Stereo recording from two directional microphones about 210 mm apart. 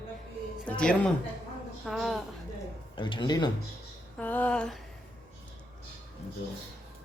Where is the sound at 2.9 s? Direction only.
20° left (ahead or behind).